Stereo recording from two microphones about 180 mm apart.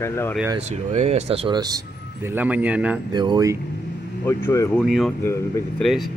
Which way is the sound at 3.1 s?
25° right (ahead or behind).